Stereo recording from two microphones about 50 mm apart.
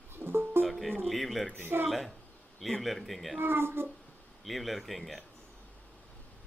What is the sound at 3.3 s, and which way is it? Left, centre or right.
Speech, right.